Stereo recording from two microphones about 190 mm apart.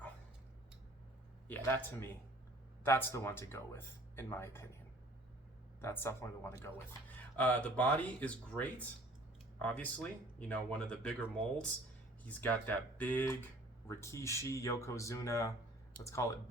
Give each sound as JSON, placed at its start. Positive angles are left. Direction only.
{"t": 1.5, "sound": "speech", "side_deg": 10}
{"t": 5.8, "sound": "speech", "side_deg": 15}